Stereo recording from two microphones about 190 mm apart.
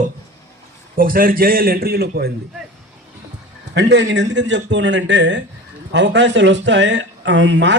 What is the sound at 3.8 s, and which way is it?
Speech, 70° right (ahead or behind).